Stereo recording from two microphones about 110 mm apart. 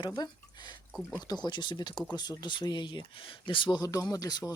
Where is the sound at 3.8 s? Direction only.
30° left (ahead or behind).